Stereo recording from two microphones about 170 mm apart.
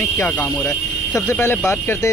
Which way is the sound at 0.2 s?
10° left (ahead or behind).